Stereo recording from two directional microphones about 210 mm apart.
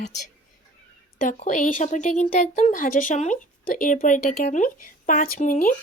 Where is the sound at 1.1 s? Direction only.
35° left (ahead or behind).